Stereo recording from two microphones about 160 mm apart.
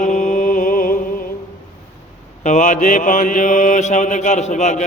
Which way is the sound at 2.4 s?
50° left (ahead or behind).